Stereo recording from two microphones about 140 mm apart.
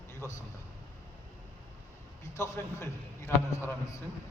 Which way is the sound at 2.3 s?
20° left (ahead or behind).